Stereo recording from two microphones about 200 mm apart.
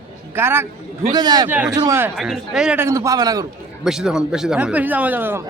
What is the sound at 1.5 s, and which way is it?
Speech, 5° right (ahead or behind).